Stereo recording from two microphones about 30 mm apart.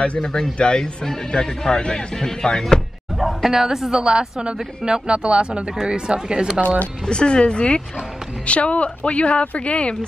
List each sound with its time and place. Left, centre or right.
0.2 s speech: left
3.2 s a sound: centre
3.5 s a woman's voice: centre
4.5 s speech: right
7.1 s a woman's voice: left